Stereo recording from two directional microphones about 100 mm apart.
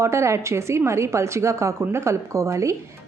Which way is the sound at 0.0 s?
30° right (ahead or behind).